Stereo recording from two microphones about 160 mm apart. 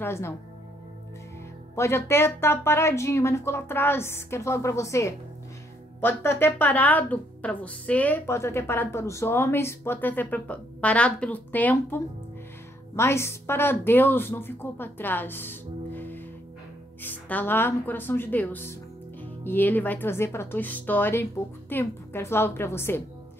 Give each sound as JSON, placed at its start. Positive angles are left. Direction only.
{"t": 0.0, "sound": "a woman's voice", "side_deg": 15}
{"t": 1.8, "sound": "a woman's voice", "side_deg": 15}